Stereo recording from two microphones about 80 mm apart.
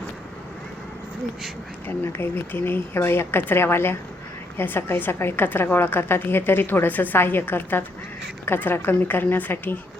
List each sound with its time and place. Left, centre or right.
1.9 s a woman's voice: left